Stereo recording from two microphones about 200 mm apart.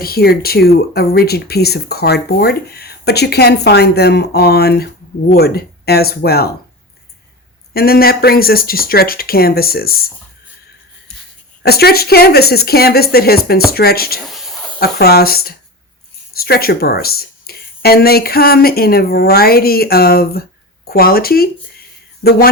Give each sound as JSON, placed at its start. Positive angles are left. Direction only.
{"t": 0.0, "sound": "speech", "side_deg": 50}
{"t": 7.7, "sound": "speech", "side_deg": 50}
{"t": 11.6, "sound": "speech", "side_deg": 50}
{"t": 14.3, "sound": "a sound", "side_deg": 0}
{"t": 14.8, "sound": "speech", "side_deg": 50}